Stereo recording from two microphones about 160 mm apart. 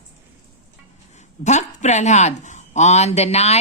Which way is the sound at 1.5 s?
45° left (ahead or behind).